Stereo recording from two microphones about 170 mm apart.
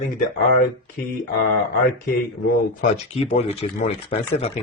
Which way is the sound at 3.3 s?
35° left (ahead or behind).